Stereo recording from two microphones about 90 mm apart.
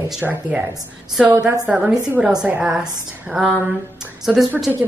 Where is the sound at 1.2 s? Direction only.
15° right (ahead or behind).